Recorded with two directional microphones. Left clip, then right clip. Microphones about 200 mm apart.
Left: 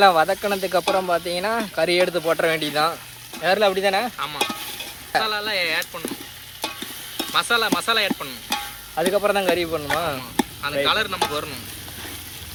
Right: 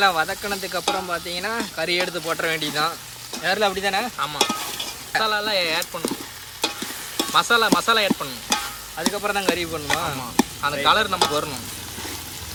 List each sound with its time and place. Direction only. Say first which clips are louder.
0.0 s speech: left 4 dB; centre (ahead or behind)
5.2 s stir: right 5 dB; 20° right (ahead or behind)
7.2 s stir: right 2 dB; 25° right (ahead or behind)
9.0 s speech: left 5 dB; centre (ahead or behind)
10.3 s sizzle: right 3 dB; 30° right (ahead or behind)
10.8 s stir: right 4 dB; 25° right (ahead or behind)